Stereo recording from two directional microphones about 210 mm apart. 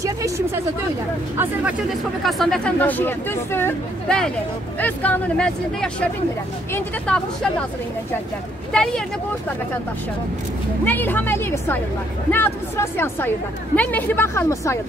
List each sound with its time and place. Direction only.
1.4 s speech: 5° right (ahead or behind)
7.1 s speech: 5° left (ahead or behind)
8.7 s speech: 5° left (ahead or behind)
10.9 s speech: 10° left (ahead or behind)